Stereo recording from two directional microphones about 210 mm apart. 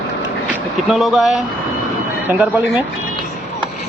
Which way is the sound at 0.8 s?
Centre (ahead or behind).